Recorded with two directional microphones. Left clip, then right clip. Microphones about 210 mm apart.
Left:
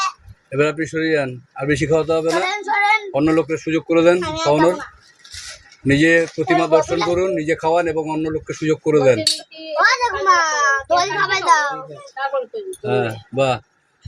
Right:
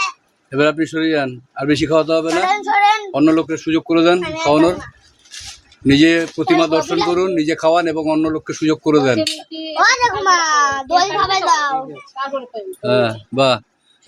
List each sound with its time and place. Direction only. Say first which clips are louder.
0.5 s speech: right 3 dB; 20° right (ahead or behind)
4.2 s speech: even; 10° left (ahead or behind)
4.4 s speech: right 2 dB; 30° right (ahead or behind)
5.9 s speech: right 1 dB; 25° right (ahead or behind)
9.7 s a sound: right 2 dB; 35° right (ahead or behind)
12.8 s speech: right 5 dB; 35° right (ahead or behind)